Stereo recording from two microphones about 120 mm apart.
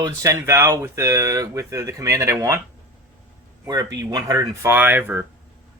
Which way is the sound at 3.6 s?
30° right (ahead or behind).